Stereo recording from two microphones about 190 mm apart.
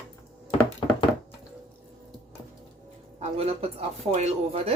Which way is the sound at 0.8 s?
25° left (ahead or behind).